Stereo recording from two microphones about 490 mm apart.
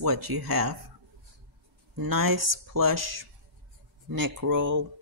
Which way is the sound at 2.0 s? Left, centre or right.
Right.